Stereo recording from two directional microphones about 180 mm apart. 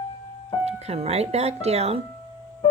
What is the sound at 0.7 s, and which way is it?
Speech, 35° right (ahead or behind).